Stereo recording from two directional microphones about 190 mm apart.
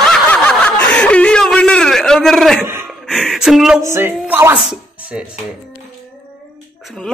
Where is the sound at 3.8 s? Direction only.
15° right (ahead or behind).